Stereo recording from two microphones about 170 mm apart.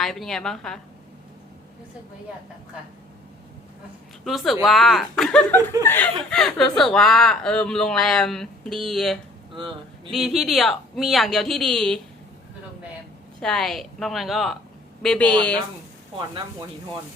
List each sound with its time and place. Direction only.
0.0 s speech: centre (ahead or behind)
4.2 s a woman's voice: centre (ahead or behind)
6.3 s speech: centre (ahead or behind)
9.5 s speech: 30° right (ahead or behind)
10.1 s speech: centre (ahead or behind)
13.4 s a woman's voice: 5° left (ahead or behind)